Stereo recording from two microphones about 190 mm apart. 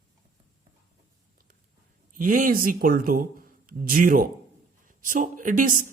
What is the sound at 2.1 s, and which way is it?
A woman's voice, 45° right (ahead or behind).